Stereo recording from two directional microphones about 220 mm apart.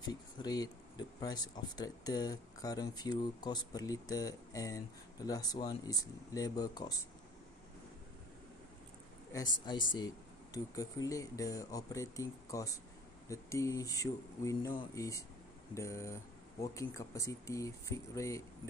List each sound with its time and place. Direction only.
0.1 s speech: 20° left (ahead or behind)
9.9 s speech: 15° left (ahead or behind)